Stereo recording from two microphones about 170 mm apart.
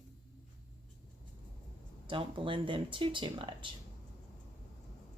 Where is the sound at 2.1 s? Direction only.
30° right (ahead or behind).